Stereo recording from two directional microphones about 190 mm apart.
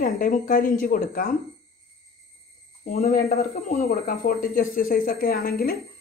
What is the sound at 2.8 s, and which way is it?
Speech, 45° left (ahead or behind).